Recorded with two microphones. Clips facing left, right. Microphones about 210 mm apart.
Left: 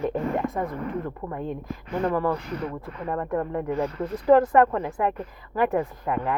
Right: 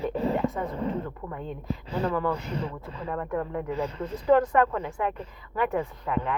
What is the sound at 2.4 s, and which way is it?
Speech, 30° right (ahead or behind).